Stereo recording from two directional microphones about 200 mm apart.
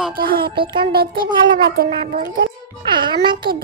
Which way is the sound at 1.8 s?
45° right (ahead or behind).